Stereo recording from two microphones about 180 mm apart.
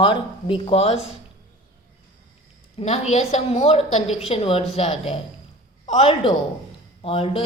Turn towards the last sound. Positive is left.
turn(degrees=30)  # may be behind; listen again after turning